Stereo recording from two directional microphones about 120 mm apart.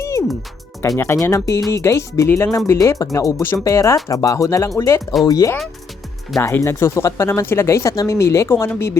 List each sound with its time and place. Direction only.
0.0 s music: 25° left (ahead or behind)
0.8 s speech: 20° left (ahead or behind)